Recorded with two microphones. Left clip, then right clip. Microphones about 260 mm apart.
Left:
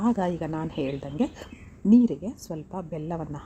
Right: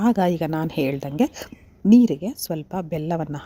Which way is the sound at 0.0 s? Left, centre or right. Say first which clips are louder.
Right 6 dB; right.